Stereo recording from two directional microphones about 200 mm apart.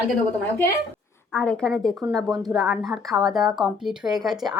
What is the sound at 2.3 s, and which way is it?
Speech, 20° right (ahead or behind).